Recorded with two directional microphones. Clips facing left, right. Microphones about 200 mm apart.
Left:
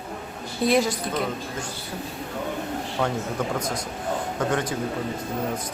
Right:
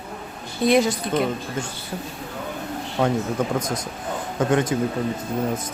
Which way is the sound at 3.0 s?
20° right (ahead or behind).